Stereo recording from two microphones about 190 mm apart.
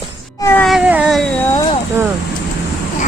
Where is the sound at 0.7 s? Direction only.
5° right (ahead or behind).